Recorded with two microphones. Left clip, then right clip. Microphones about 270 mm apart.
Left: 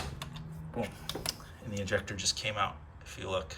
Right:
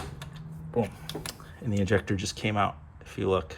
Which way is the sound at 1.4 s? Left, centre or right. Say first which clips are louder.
Right 7 dB; right.